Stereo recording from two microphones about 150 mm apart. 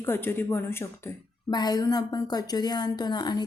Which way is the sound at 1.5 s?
25° left (ahead or behind).